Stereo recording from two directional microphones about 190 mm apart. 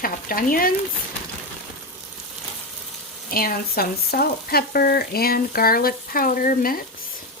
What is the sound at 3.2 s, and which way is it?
Frying, 50° left (ahead or behind).